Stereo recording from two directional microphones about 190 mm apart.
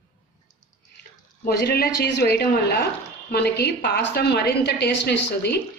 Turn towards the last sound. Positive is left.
turn(degrees=60)  # may be behind; listen again after turning